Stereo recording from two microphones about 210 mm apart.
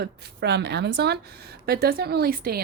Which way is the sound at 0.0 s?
50° right (ahead or behind).